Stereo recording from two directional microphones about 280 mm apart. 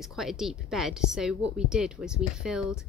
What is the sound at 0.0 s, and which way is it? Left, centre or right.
Speech, centre.